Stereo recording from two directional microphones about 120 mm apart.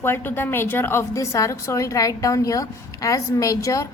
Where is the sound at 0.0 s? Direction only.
15° left (ahead or behind).